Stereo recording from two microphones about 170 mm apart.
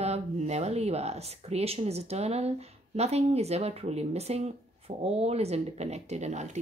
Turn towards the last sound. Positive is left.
turn(degrees=-40)  # may be behind; listen again after turning